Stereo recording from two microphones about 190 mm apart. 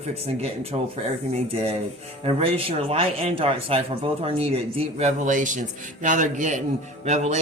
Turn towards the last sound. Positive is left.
turn(degrees=-35)  # may be behind; listen again after turning